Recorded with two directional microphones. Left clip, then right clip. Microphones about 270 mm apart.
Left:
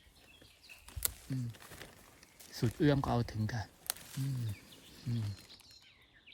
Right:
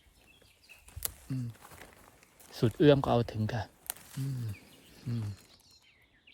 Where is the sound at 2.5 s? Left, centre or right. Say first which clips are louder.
Right 8 dB; centre.